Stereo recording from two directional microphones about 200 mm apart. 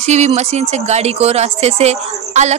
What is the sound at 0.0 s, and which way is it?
Speech, 35° right (ahead or behind).